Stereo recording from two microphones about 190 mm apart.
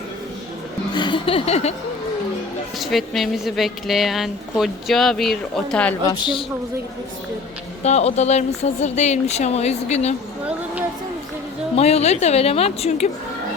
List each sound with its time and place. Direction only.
0.9 s speech: 25° left (ahead or behind)
2.7 s a woman's voice: centre (ahead or behind)
6.1 s speech: 25° left (ahead or behind)
7.9 s speech: 35° left (ahead or behind)
11.8 s speech: 35° left (ahead or behind)